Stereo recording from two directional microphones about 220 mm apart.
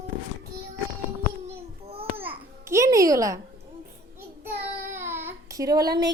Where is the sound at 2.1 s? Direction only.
10° right (ahead or behind).